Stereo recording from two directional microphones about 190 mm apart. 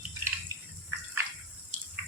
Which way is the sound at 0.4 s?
15° right (ahead or behind).